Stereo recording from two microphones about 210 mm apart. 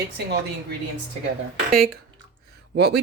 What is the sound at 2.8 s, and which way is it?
Speech, 50° right (ahead or behind).